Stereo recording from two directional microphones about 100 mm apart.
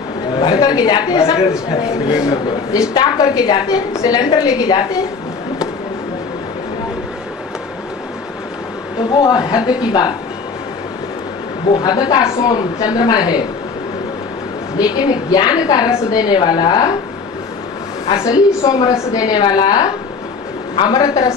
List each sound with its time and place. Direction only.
0.4 s a sound: 45° left (ahead or behind)
2.9 s a woman's voice: 45° left (ahead or behind)
9.1 s a woman's voice: 45° left (ahead or behind)
11.7 s a woman's voice: 45° left (ahead or behind)
14.8 s a woman's voice: 40° left (ahead or behind)
18.2 s a woman's voice: 35° left (ahead or behind)